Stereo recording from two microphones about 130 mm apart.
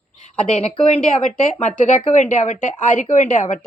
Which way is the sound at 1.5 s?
70° left (ahead or behind).